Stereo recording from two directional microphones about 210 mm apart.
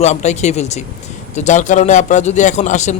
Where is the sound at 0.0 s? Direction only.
35° left (ahead or behind).